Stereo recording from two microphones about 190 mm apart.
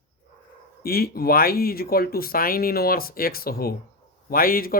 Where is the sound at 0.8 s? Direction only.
55° left (ahead or behind).